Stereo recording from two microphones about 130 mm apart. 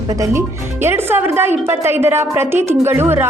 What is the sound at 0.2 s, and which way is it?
Speech, 20° right (ahead or behind).